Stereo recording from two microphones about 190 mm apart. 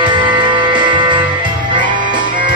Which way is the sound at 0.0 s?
25° right (ahead or behind).